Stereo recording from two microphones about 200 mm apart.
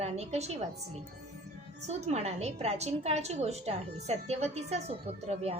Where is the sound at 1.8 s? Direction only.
35° right (ahead or behind).